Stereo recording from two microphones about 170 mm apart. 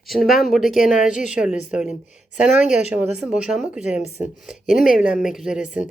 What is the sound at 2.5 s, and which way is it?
Speech, 45° left (ahead or behind).